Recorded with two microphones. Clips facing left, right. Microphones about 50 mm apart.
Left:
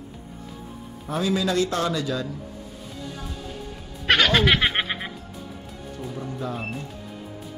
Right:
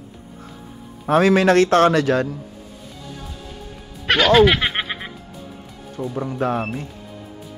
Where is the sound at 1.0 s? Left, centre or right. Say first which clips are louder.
Right 10 dB; right.